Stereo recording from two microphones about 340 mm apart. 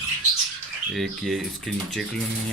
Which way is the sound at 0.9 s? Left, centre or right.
Centre.